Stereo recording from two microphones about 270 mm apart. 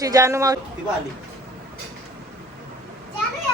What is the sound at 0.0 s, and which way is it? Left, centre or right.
Speech, centre.